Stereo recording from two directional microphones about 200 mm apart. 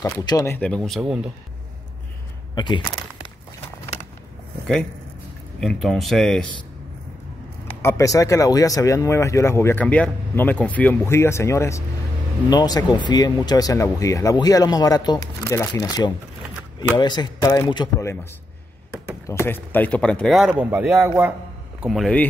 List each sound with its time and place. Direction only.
0.2 s a man's voice: 20° left (ahead or behind); by 1.3 s 5° right (ahead or behind)
2.5 s speech: 20° left (ahead or behind)
5.6 s a man's voice: centre (ahead or behind)
7.8 s speech: 15° left (ahead or behind)
19.2 s a man's voice: 15° left (ahead or behind); by 21.3 s 10° right (ahead or behind)
21.8 s a man's voice: centre (ahead or behind)